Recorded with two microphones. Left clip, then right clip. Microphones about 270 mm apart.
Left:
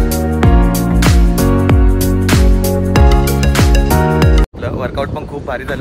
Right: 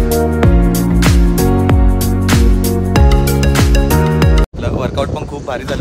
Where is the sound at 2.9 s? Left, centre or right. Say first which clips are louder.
Even; centre.